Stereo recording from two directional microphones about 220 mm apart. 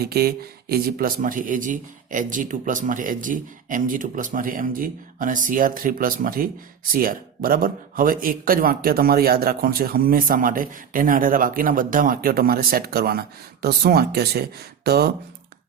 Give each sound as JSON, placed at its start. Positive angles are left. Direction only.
{"t": 0.0, "sound": "a man's voice", "side_deg": -45}